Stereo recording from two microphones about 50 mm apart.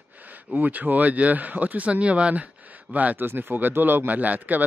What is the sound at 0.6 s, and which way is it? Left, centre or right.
Speech, right.